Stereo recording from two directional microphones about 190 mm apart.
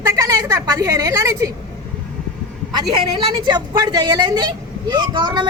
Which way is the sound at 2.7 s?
25° right (ahead or behind).